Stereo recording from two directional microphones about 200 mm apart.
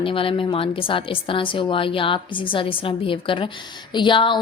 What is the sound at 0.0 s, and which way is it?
A woman's voice, 25° left (ahead or behind).